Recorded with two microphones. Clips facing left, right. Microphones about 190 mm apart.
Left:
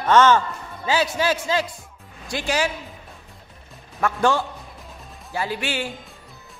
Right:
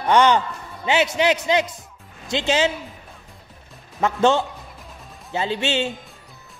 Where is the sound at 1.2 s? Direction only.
20° right (ahead or behind).